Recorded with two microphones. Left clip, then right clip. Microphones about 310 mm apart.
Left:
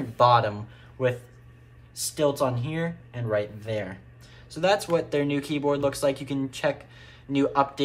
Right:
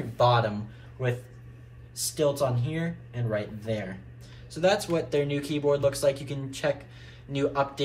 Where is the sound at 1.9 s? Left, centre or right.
Centre.